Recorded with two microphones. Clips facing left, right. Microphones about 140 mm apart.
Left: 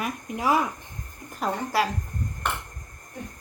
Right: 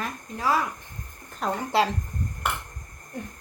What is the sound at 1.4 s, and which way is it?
Speech, centre (ahead or behind).